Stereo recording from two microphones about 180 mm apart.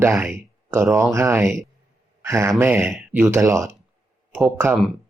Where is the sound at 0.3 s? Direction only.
15° right (ahead or behind).